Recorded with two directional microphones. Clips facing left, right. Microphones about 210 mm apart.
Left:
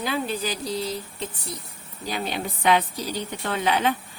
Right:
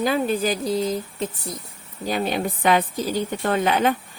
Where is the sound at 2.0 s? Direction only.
50° right (ahead or behind).